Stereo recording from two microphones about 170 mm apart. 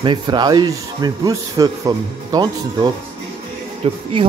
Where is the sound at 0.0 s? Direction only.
25° right (ahead or behind).